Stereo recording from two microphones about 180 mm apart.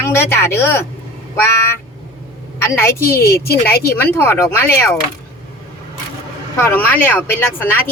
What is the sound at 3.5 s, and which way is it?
Speech, 60° left (ahead or behind).